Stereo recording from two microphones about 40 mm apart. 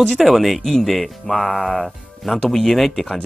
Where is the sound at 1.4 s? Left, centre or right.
Left.